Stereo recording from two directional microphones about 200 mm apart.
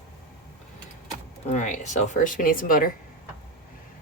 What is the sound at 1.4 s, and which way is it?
Speech, 35° left (ahead or behind).